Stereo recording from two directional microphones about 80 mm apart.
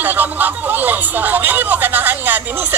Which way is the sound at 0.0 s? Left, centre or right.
Right.